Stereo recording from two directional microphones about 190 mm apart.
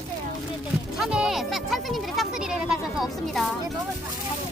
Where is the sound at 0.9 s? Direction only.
Centre (ahead or behind).